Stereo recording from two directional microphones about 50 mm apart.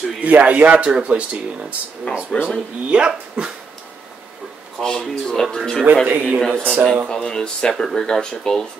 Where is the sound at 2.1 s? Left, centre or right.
Left.